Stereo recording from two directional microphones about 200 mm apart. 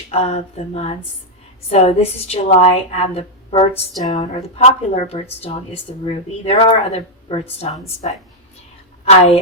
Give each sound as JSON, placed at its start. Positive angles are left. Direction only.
{"t": 0.1, "sound": "a woman's voice", "side_deg": 30}